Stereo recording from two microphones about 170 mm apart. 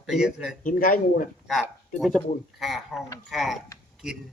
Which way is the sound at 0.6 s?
55° left (ahead or behind).